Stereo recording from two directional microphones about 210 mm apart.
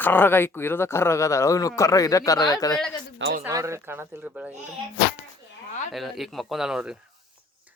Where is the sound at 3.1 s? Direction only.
55° right (ahead or behind).